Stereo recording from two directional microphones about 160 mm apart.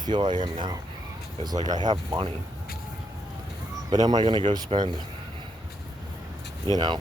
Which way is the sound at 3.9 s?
25° right (ahead or behind).